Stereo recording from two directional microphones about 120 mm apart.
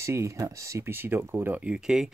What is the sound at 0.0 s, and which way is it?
Speech, 25° right (ahead or behind).